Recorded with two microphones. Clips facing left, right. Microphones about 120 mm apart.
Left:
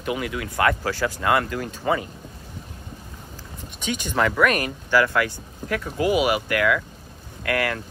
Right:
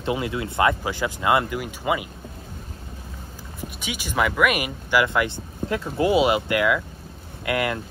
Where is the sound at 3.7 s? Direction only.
10° right (ahead or behind).